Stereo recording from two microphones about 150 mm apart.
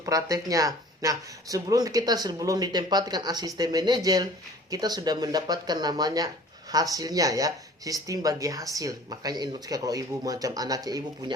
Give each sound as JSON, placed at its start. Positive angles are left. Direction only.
{"t": 0.0, "sound": "speech", "side_deg": -20}